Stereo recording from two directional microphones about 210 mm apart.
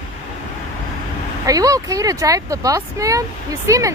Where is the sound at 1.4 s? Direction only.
15° right (ahead or behind).